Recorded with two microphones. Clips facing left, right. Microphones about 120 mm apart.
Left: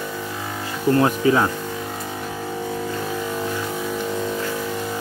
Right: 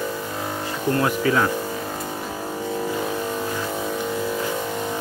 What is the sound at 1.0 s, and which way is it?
Speech, 25° left (ahead or behind).